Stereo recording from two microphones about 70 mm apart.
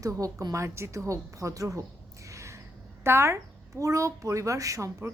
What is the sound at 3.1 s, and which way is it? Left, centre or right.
Speech, right.